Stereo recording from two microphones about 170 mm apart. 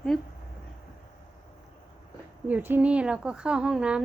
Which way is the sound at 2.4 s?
10° right (ahead or behind).